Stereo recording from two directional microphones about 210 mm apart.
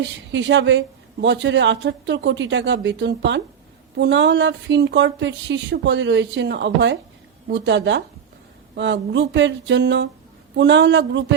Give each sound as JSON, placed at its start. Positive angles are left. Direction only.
{"t": 0.0, "sound": "speech", "side_deg": -60}